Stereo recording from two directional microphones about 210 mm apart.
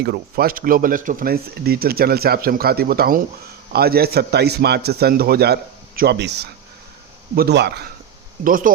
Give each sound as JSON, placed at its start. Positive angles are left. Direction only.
{"t": 0.0, "sound": "speech", "side_deg": -45}
{"t": 8.4, "sound": "speech", "side_deg": -40}